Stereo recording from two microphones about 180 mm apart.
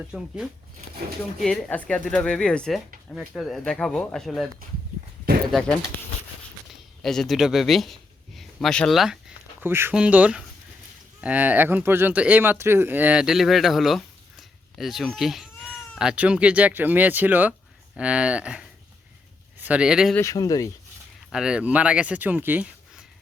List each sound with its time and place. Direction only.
0.1 s speech: 5° right (ahead or behind)
1.4 s speech: centre (ahead or behind)
5.5 s speech: centre (ahead or behind)
7.0 s speech: centre (ahead or behind)
9.6 s speech: 10° right (ahead or behind)
20.1 s speech: 20° left (ahead or behind)
21.3 s speech: 5° right (ahead or behind)